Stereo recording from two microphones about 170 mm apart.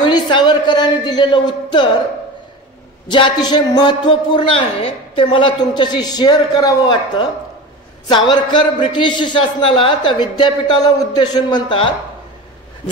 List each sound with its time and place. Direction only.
0.0 s speech: 25° left (ahead or behind)
3.1 s a man's voice: 25° left (ahead or behind)